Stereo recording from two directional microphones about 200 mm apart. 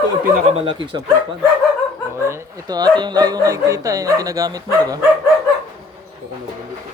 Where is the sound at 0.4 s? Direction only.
30° right (ahead or behind).